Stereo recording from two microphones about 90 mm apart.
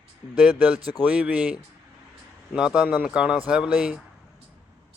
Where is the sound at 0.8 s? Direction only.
50° left (ahead or behind).